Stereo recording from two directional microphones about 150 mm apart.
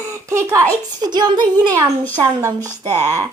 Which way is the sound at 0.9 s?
30° right (ahead or behind).